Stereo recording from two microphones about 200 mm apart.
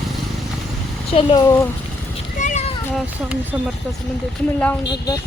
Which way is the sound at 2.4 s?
35° left (ahead or behind).